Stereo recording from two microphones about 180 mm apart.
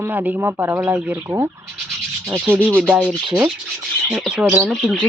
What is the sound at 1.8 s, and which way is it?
Rub, 5° right (ahead or behind).